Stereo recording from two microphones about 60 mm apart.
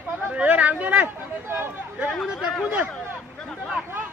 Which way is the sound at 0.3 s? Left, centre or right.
Right.